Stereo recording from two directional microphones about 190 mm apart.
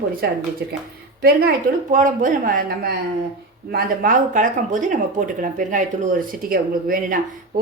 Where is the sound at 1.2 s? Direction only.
50° right (ahead or behind).